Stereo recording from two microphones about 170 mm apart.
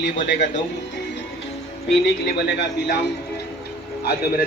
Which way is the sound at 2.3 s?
80° left.